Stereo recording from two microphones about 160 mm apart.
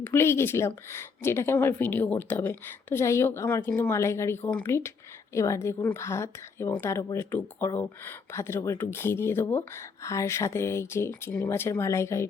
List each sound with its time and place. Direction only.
0.0 s speech: 15° left (ahead or behind)